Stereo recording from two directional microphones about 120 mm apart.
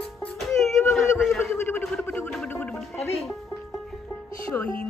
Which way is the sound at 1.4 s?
20° left (ahead or behind).